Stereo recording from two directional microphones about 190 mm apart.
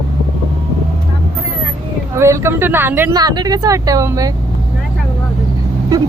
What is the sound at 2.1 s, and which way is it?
Speech, 15° right (ahead or behind).